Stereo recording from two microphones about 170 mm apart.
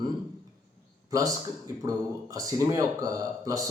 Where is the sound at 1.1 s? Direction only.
20° right (ahead or behind).